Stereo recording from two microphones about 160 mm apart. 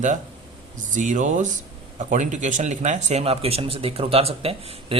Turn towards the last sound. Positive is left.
turn(degrees=-35)  # may be behind; listen again after turning